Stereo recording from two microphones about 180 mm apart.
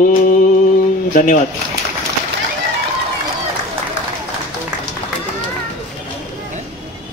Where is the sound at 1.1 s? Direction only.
45° left (ahead or behind).